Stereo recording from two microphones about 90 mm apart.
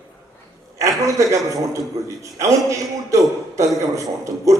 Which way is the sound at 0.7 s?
35° right (ahead or behind).